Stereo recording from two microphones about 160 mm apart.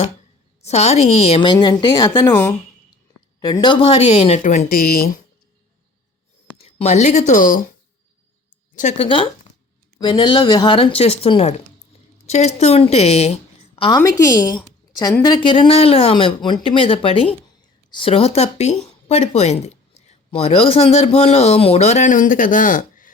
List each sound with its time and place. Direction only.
0.6 s a woman's voice: 40° left (ahead or behind); by 2.6 s 15° left (ahead or behind)
3.5 s speech: 30° left (ahead or behind); by 5.1 s 65° left (ahead or behind)
6.6 s speech: 40° left (ahead or behind); by 7.6 s 60° left (ahead or behind)
8.7 s speech: 50° left (ahead or behind)
9.0 s a woman's voice: 35° left (ahead or behind); by 23.1 s 55° left (ahead or behind)